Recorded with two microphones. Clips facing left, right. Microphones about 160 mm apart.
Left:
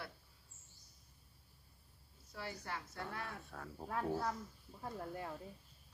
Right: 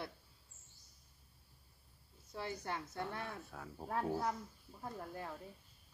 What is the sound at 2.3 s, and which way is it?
Speech, 25° right (ahead or behind).